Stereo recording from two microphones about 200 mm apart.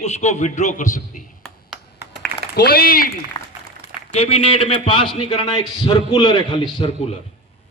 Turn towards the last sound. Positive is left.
turn(degrees=25)  # may be behind; listen again after turning